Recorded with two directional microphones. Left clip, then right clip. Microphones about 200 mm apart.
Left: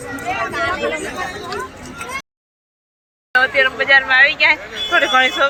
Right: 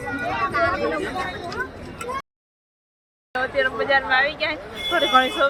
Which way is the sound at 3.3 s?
5° right (ahead or behind).